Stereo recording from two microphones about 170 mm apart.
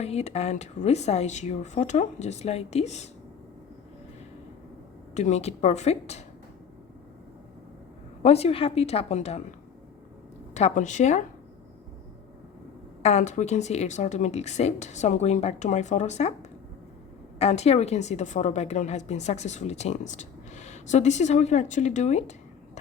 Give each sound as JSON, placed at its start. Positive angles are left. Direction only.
{"t": 0.0, "sound": "speech", "side_deg": 40}
{"t": 5.1, "sound": "speech", "side_deg": 40}
{"t": 8.2, "sound": "a woman's voice", "side_deg": 35}
{"t": 13.0, "sound": "a woman's voice", "side_deg": 40}